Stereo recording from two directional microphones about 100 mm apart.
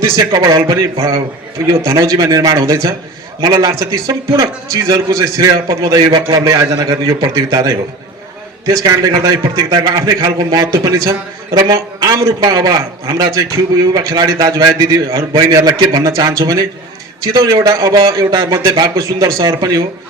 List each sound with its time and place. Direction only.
0.2 s a man's voice: 40° right (ahead or behind)
1.8 s a man's voice: 35° right (ahead or behind)